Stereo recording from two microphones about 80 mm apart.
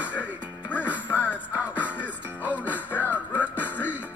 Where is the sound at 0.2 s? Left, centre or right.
Left.